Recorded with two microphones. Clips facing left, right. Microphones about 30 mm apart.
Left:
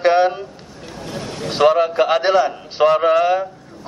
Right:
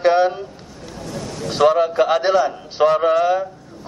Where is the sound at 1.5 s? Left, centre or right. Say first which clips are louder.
Left 1 dB; centre.